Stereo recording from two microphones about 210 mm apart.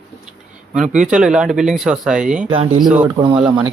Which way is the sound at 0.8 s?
5° right (ahead or behind).